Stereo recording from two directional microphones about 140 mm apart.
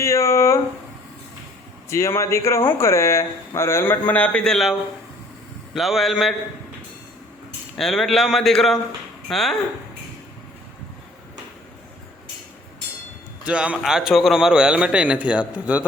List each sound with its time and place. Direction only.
0.0 s speech: 20° left (ahead or behind)
1.9 s a man's voice: 20° left (ahead or behind); by 6.3 s centre (ahead or behind)
7.8 s a man's voice: centre (ahead or behind)
13.4 s a man's voice: 10° right (ahead or behind)